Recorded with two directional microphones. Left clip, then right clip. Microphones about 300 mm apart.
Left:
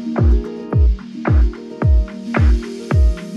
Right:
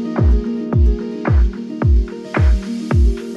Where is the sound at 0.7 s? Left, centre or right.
Centre.